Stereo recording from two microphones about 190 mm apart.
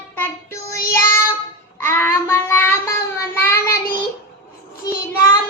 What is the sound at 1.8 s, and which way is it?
Child singing, 10° left (ahead or behind).